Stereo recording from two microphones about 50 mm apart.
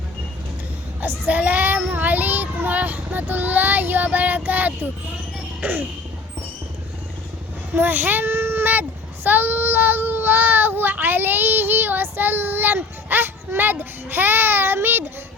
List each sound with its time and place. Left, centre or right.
1.3 s child singing: right
5.6 s a sound: right
7.8 s a child's voice: right